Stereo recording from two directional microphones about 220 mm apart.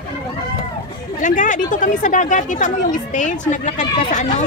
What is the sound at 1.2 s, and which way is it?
Speech, 35° left (ahead or behind).